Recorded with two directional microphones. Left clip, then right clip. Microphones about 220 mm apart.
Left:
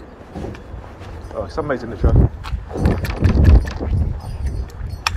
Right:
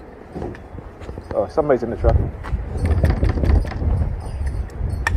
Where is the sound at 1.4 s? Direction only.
40° right (ahead or behind).